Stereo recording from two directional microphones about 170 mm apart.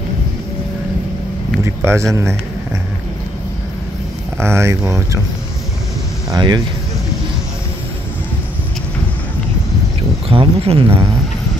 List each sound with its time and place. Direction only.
1.6 s a sound: 15° right (ahead or behind)
4.4 s speech: 15° right (ahead or behind)
6.3 s speech: 25° right (ahead or behind)
10.2 s speech: 35° right (ahead or behind)